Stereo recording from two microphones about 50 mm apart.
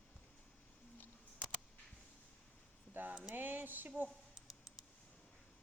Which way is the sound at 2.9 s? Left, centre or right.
Right.